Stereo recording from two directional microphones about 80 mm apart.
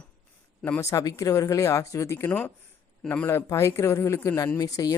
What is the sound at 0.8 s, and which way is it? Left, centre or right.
Speech, left.